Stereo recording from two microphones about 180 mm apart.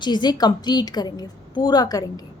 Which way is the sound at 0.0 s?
25° left (ahead or behind).